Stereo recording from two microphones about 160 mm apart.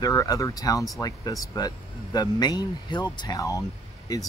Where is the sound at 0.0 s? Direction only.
25° left (ahead or behind).